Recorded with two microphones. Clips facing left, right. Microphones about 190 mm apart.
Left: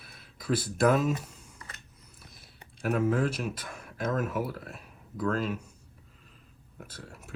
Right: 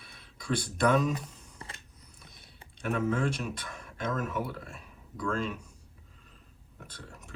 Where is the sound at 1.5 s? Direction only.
30° right (ahead or behind).